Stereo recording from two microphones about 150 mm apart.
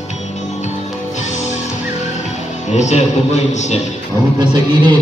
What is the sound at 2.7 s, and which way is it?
Speech, 50° left (ahead or behind).